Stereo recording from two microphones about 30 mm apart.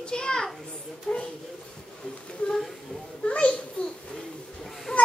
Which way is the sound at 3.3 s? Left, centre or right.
Left.